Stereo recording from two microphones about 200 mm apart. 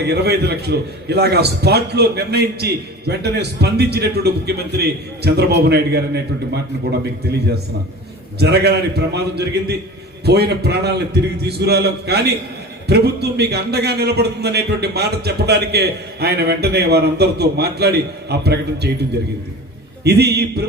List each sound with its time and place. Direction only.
0.0 s a man's voice: 55° right (ahead or behind)
8.4 s a man's voice: 55° right (ahead or behind)
20.1 s a man's voice: 55° right (ahead or behind)